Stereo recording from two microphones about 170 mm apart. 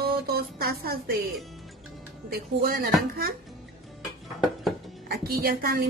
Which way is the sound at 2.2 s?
60° right (ahead or behind).